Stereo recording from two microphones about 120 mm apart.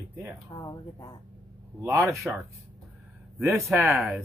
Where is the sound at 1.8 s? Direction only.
25° right (ahead or behind).